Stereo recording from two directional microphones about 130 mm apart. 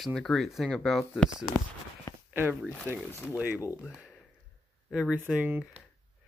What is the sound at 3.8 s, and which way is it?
Speech, centre (ahead or behind).